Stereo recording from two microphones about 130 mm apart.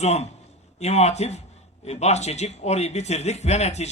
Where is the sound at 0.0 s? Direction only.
60° left (ahead or behind).